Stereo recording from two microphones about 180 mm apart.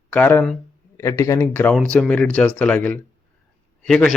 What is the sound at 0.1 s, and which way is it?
Speech, 10° left (ahead or behind).